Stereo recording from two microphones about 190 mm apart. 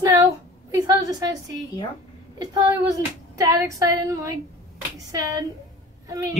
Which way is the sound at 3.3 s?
15° right (ahead or behind).